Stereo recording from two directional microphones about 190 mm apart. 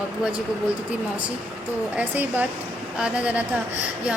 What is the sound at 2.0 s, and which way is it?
A woman's voice, 5° right (ahead or behind).